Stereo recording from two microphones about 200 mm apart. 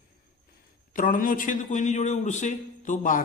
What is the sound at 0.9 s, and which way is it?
A man's voice, 40° left (ahead or behind).